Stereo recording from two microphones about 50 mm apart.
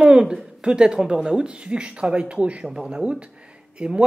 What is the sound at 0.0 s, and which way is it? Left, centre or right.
Speech, centre.